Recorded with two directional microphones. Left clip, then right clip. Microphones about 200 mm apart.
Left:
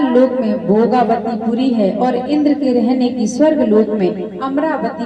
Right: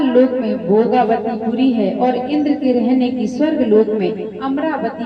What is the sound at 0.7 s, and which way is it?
Music, 40° left (ahead or behind).